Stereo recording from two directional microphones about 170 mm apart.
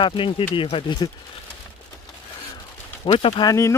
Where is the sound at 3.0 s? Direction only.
35° left (ahead or behind).